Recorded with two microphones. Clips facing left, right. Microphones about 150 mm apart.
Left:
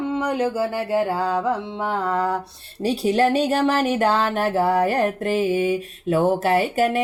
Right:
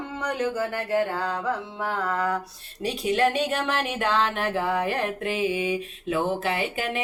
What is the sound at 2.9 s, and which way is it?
Speech, 35° left (ahead or behind).